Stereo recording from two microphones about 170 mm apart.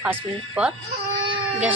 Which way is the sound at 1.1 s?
30° right (ahead or behind).